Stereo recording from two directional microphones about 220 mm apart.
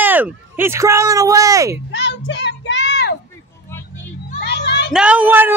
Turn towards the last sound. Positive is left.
turn(degrees=-10)  # may be behind; listen again after turning